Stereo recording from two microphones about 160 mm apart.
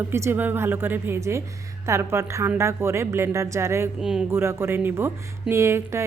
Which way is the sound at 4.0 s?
5° right (ahead or behind).